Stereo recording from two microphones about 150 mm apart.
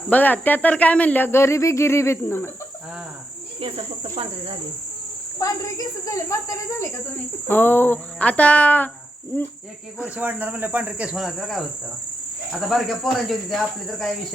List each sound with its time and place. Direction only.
0.1 s speech: 10° left (ahead or behind)
3.6 s cricket: 40° right (ahead or behind)
5.4 s speech: 20° left (ahead or behind)
10.2 s speech: 10° right (ahead or behind)
12.6 s cricket: centre (ahead or behind)